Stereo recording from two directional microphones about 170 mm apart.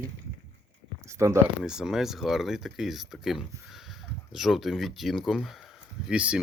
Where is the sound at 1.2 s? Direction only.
15° right (ahead or behind).